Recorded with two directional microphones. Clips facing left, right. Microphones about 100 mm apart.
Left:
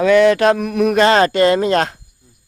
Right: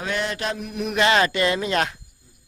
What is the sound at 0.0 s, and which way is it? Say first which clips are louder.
Mantra: left 15 dB; 90° left.